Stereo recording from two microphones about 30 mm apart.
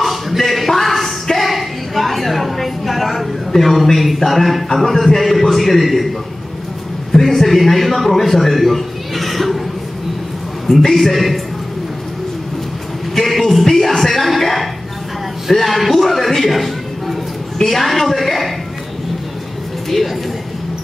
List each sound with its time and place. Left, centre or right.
0.0 s a sound: centre
3.5 s a man's voice: centre
7.1 s a man's voice: centre
10.8 s a man's voice: centre
13.4 s music: centre
15.5 s a sound: centre
17.6 s a man's voice: centre